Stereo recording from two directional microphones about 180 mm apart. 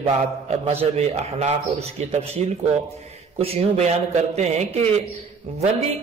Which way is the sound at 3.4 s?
35° right (ahead or behind).